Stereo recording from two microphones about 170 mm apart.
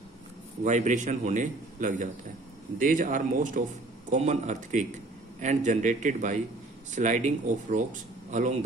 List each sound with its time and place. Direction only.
0.7 s a man's voice: 45° right (ahead or behind)